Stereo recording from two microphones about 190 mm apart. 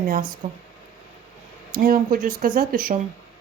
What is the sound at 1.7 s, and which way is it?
Speech, 50° right (ahead or behind).